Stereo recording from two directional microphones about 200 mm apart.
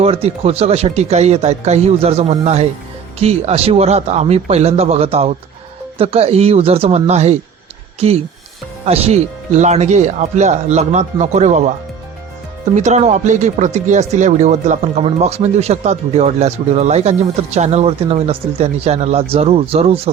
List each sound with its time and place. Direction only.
0.0 s speech: 30° right (ahead or behind)
12.7 s speech: 35° right (ahead or behind)